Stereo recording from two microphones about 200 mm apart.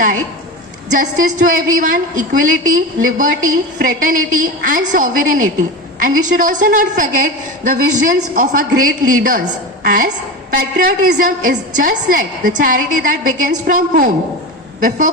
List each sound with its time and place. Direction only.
0.9 s a woman's voice: 40° right (ahead or behind)